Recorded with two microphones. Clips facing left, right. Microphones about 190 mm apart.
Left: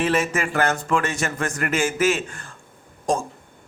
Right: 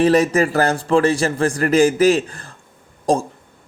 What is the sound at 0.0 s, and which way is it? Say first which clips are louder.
A man's voice: right 8 dB; 35° right (ahead or behind).